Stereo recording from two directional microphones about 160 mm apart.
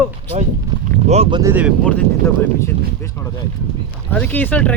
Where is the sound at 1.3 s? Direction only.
20° right (ahead or behind).